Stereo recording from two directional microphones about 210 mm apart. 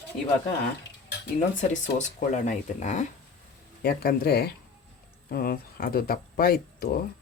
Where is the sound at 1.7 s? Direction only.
35° left (ahead or behind).